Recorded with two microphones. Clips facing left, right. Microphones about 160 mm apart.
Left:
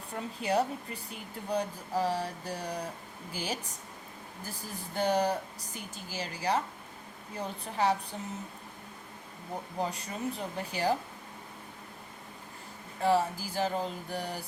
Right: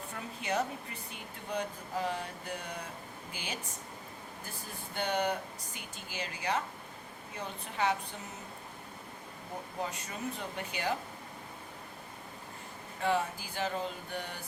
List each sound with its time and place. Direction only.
0.1 s speech: 30° left (ahead or behind)
4.9 s speech: 35° left (ahead or behind)
9.8 s speech: 35° left (ahead or behind)
13.0 s speech: 35° left (ahead or behind)